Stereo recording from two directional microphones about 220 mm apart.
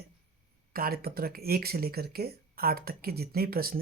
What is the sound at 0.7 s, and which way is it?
Speech, 40° right (ahead or behind).